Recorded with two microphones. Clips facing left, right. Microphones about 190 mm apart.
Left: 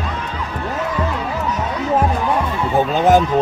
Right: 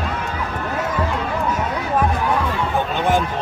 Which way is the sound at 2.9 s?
40° left (ahead or behind).